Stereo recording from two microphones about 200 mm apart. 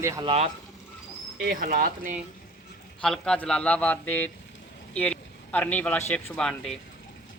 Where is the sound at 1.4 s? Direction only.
45° right (ahead or behind).